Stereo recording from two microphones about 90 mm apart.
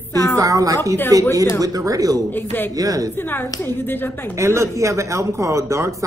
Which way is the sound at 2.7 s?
40° right (ahead or behind).